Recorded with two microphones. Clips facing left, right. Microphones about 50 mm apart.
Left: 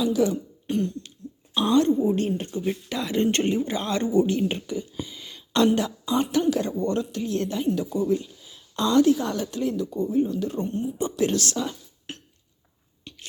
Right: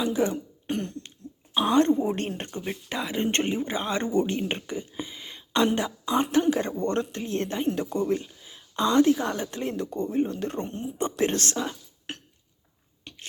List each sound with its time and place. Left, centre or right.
0.0 s speech: right
1.9 s speech: right
2.1 s speech: right
2.6 s speech: centre
4.0 s speech: right
8.2 s a woman's voice: right
9.7 s speech: right
10.2 s speech: right
11.5 s speech: right
12.1 s cough: right
13.1 s a sound: right